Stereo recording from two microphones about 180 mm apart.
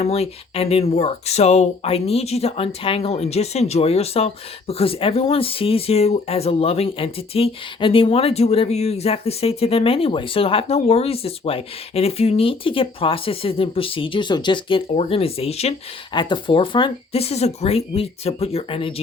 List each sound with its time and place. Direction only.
0.0 s speech: 35° left (ahead or behind)